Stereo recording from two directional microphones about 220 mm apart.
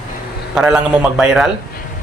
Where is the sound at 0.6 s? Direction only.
5° right (ahead or behind).